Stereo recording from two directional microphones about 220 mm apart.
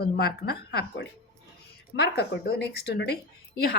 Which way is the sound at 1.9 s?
50° left (ahead or behind).